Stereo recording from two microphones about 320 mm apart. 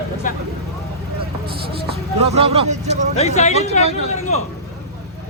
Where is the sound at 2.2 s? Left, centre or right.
Centre.